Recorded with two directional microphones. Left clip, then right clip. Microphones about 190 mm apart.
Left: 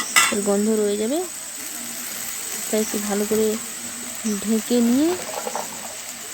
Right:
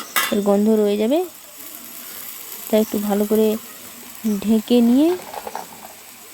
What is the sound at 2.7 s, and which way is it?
Speech, 35° right (ahead or behind).